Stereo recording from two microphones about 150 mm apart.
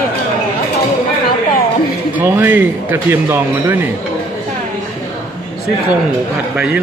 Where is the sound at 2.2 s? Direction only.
15° right (ahead or behind).